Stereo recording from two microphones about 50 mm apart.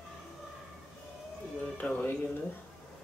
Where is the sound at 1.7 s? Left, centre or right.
Left.